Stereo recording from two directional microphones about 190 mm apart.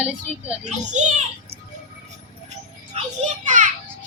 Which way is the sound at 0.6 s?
40° right (ahead or behind).